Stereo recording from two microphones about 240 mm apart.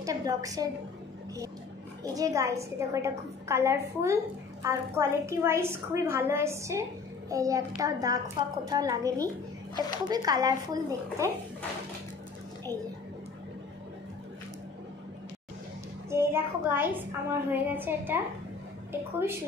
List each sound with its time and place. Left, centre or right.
0.0 s a woman's voice: centre
2.1 s a woman's voice: centre
16.1 s a woman's voice: centre